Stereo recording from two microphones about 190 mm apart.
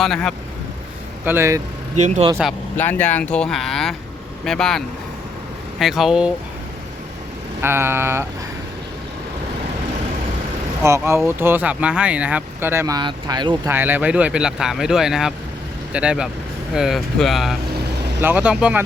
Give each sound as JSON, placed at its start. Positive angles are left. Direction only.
{"t": 0.0, "sound": "speech", "side_deg": 0}
{"t": 1.2, "sound": "speech", "side_deg": -10}
{"t": 2.0, "sound": "speech", "side_deg": -40}
{"t": 2.7, "sound": "speech", "side_deg": 10}
{"t": 5.8, "sound": "speech", "side_deg": 0}
{"t": 7.6, "sound": "speech", "side_deg": -15}
{"t": 10.8, "sound": "speech", "side_deg": -15}
{"t": 13.7, "sound": "speech", "side_deg": -10}
{"t": 17.7, "sound": "vehicle", "side_deg": -60}
{"t": 18.2, "sound": "speech", "side_deg": -10}